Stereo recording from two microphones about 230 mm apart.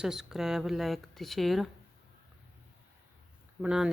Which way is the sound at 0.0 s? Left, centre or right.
Centre.